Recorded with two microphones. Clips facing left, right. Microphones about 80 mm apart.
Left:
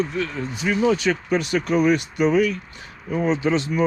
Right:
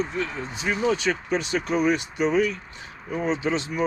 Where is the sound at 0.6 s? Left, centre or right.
Left.